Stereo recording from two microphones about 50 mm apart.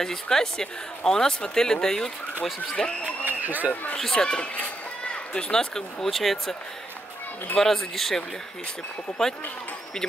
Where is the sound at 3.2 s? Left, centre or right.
Right.